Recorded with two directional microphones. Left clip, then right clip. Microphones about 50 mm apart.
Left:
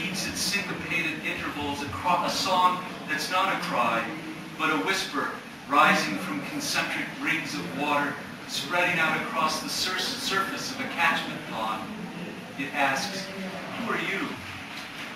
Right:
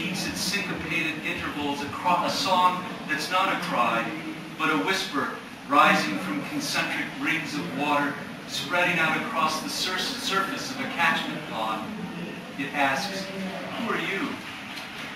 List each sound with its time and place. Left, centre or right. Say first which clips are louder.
0.0 s a sound: even; centre
4.6 s a man's voice: right 1 dB; centre
12.7 s a man's voice: right 1 dB; centre